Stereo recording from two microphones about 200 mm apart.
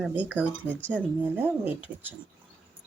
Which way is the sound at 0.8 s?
5° left (ahead or behind).